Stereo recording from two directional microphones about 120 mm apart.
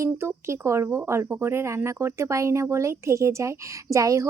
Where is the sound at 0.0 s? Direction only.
20° right (ahead or behind).